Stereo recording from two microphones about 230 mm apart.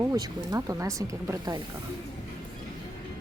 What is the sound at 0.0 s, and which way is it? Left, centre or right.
Speech, centre.